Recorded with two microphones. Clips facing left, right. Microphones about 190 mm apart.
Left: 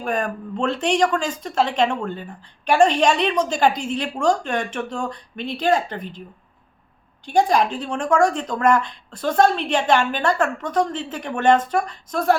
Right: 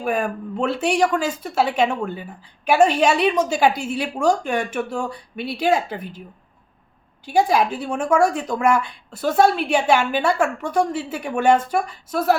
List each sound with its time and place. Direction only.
0.0 s speech: 5° right (ahead or behind)
7.3 s speech: 5° right (ahead or behind)